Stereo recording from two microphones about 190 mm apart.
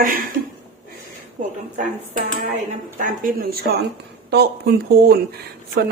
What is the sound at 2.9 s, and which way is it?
Speech, 45° right (ahead or behind).